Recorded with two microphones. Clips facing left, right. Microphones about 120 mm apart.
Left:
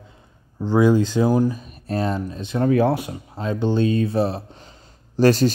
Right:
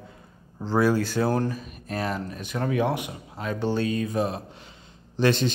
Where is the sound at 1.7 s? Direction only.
30° left (ahead or behind).